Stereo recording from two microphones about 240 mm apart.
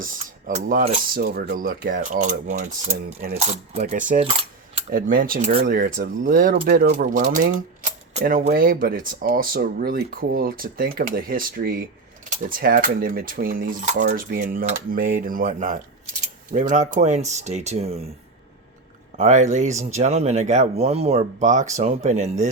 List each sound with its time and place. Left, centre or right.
0.0 s speech: right
4.1 s coin: right
4.9 s speech: right
19.1 s speech: right